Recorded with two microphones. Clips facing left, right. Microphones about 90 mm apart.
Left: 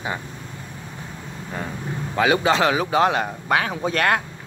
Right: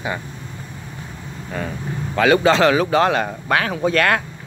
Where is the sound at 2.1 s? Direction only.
10° left (ahead or behind).